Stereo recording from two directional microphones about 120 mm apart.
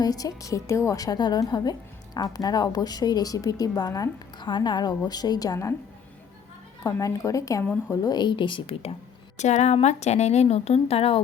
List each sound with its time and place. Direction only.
0.0 s speech: 30° left (ahead or behind)
6.8 s a woman's voice: 30° left (ahead or behind); by 9.0 s 55° left (ahead or behind)
9.4 s a woman's voice: 75° left (ahead or behind); by 11.2 s 55° left (ahead or behind)